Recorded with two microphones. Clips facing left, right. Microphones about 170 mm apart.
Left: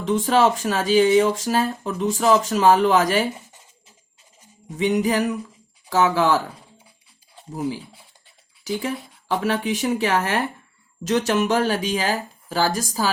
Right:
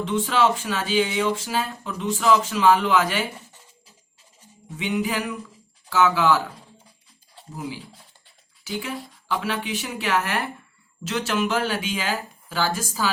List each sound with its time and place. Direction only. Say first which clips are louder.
0.0 s speech: left 3 dB; 45° left (ahead or behind)
4.8 s speech: left 6 dB; 40° left (ahead or behind)
9.3 s speech: left 5 dB; 45° left (ahead or behind)